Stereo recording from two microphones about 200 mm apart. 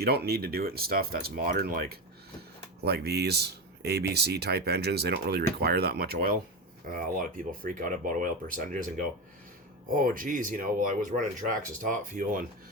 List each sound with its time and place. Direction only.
0.0 s speech: 50° right (ahead or behind)